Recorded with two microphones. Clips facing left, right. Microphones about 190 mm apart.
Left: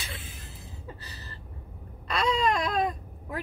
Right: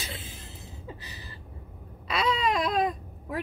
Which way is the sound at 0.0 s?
25° right (ahead or behind).